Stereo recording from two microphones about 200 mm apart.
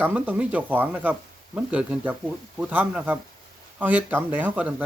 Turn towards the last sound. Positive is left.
turn(degrees=-5)  # may be behind; listen again after turning